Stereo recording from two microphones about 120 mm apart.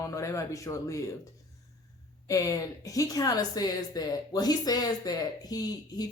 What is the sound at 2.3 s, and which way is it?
Speech, 30° left (ahead or behind).